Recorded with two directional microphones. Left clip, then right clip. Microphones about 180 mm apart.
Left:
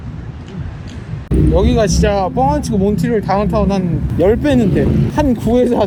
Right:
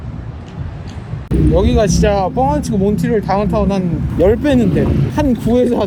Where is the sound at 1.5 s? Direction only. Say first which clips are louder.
Even; 20° left (ahead or behind).